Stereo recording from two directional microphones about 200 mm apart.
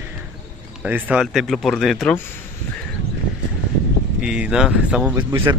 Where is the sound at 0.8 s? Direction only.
5° right (ahead or behind).